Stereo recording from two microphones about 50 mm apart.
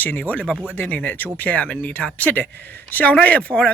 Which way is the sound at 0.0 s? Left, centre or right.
Left.